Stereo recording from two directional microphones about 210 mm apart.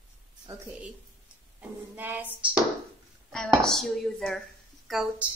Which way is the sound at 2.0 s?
10° right (ahead or behind).